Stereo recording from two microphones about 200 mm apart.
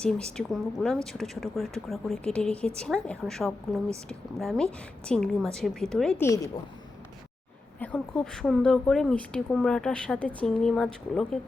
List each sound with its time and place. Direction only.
0.3 s a woman's voice: centre (ahead or behind)
6.2 s a woman's voice: 15° left (ahead or behind)
7.8 s a woman's voice: 5° left (ahead or behind)